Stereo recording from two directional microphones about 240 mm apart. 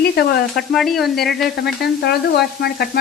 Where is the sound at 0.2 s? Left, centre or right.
Left.